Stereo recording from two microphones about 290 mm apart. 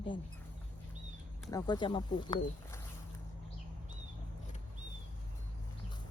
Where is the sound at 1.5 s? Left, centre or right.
Centre.